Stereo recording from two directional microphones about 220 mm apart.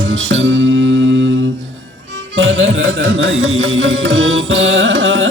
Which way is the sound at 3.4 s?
60° right (ahead or behind).